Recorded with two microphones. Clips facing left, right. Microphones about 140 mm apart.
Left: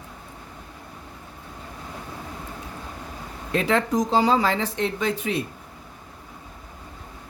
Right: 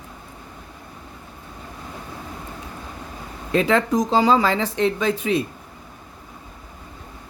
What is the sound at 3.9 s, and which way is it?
Speech, 90° right.